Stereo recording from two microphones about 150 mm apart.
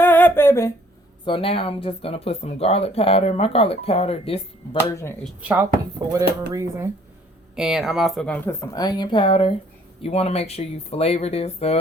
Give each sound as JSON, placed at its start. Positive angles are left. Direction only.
{"t": 0.0, "sound": "a sound", "side_deg": 15}
{"t": 1.2, "sound": "speech", "side_deg": 35}
{"t": 4.8, "sound": "speech", "side_deg": 15}
{"t": 5.4, "sound": "speech", "side_deg": -10}
{"t": 7.5, "sound": "speech", "side_deg": -5}
{"t": 8.4, "sound": "speech", "side_deg": 20}